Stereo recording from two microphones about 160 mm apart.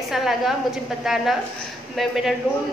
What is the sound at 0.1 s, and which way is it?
A woman's voice, centre (ahead or behind).